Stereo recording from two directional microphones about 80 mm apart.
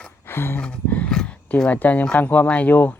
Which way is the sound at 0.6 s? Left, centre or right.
Centre.